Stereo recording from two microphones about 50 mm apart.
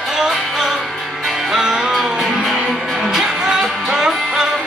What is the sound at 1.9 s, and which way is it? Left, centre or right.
Music, centre.